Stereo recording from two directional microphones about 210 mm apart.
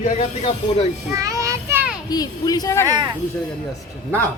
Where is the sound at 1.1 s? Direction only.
15° right (ahead or behind).